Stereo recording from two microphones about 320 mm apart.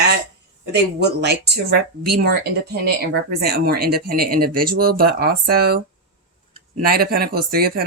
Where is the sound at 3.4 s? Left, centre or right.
Right.